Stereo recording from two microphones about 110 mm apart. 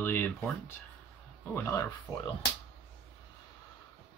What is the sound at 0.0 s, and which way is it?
Speech, 20° left (ahead or behind).